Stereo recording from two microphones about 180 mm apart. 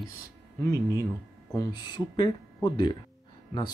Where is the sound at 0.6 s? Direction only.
15° left (ahead or behind).